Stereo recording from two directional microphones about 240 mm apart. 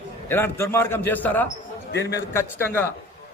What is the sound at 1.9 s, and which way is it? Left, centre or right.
Speech, left.